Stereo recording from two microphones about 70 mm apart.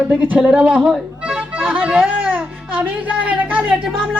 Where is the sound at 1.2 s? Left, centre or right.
Centre.